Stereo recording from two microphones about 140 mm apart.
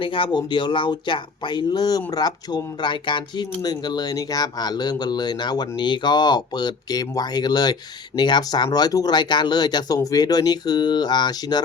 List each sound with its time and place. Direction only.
0.0 s speech: 35° left (ahead or behind)